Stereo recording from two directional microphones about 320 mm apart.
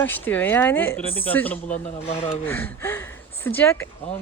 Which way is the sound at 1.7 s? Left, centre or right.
Centre.